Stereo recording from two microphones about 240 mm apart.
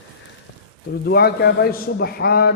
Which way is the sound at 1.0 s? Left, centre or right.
Left.